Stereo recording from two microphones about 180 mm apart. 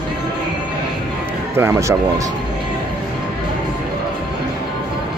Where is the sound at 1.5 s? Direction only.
15° right (ahead or behind).